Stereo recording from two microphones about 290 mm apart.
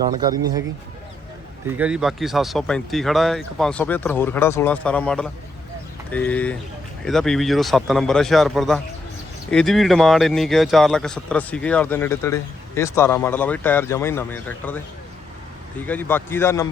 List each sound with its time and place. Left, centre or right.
0.0 s speech: centre
1.6 s speech: centre
15.9 s a man's voice: centre